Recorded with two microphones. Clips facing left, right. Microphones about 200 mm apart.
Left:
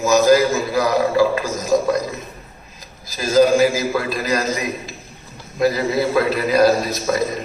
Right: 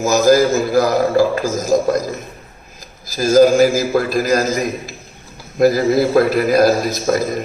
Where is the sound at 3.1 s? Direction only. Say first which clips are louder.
Right 4 dB; 45° right (ahead or behind).